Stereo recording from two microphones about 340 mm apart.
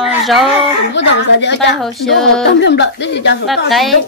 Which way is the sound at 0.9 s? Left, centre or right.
Left.